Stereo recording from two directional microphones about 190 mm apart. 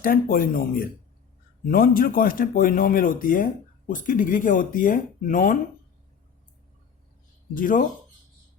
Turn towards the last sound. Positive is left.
turn(degrees=45)  # may be behind; listen again after turning